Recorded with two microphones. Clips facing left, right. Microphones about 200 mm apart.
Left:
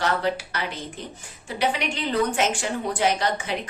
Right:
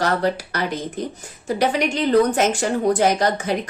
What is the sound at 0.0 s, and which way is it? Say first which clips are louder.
Speech: right 4 dB; 40° right (ahead or behind).